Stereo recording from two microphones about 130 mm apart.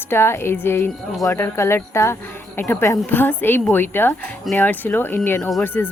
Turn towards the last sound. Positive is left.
turn(degrees=15)  # may be behind; listen again after turning